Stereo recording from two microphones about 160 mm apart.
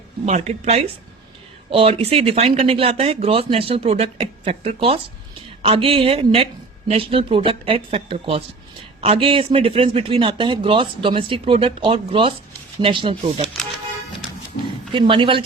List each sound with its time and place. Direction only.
0.3 s speech: 45° right (ahead or behind)
14.9 s speech: 30° right (ahead or behind)